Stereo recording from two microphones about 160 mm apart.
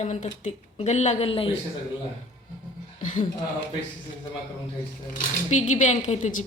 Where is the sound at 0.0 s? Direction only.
45° left (ahead or behind).